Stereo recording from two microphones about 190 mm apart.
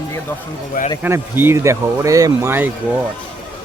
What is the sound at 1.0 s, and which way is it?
Speech, 10° right (ahead or behind).